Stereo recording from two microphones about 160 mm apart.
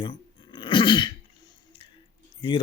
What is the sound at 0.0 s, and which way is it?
Dog, 30° left (ahead or behind).